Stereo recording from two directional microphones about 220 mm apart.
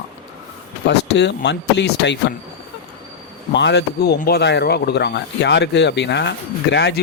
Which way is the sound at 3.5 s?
50° left (ahead or behind).